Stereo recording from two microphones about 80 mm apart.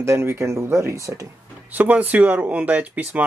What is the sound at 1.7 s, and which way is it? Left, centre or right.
Speech, right.